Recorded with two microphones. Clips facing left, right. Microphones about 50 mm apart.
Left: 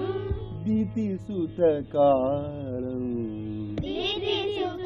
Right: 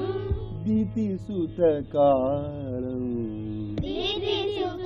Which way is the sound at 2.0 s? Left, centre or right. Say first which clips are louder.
Even; centre.